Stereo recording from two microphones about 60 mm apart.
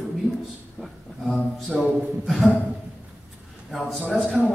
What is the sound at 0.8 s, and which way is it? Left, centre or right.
A man's voice, centre.